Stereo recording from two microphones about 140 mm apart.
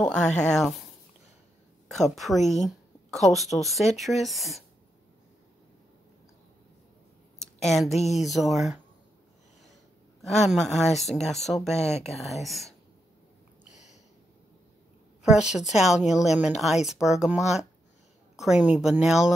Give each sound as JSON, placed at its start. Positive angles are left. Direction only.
{"t": 0.4, "sound": "a woman's voice", "side_deg": 5}
{"t": 1.9, "sound": "a woman's voice", "side_deg": 0}
{"t": 7.6, "sound": "a woman's voice", "side_deg": 0}
{"t": 10.4, "sound": "a woman's voice", "side_deg": 0}
{"t": 11.7, "sound": "speech", "side_deg": 50}
{"t": 12.1, "sound": "a woman's voice", "side_deg": 0}
{"t": 15.7, "sound": "a woman's voice", "side_deg": 0}
{"t": 17.4, "sound": "speech", "side_deg": 55}
{"t": 18.3, "sound": "a woman's voice", "side_deg": -5}